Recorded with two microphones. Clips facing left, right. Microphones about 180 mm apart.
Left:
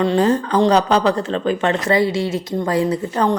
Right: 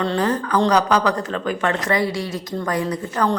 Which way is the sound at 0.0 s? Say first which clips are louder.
Left 5 dB; 20° left (ahead or behind).